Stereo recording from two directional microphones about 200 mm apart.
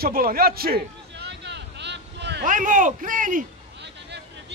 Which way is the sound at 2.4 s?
40° right (ahead or behind).